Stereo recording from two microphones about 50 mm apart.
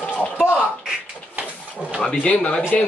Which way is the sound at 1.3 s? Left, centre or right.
Right.